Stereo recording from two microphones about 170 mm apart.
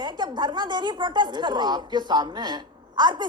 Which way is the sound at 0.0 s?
25° right (ahead or behind).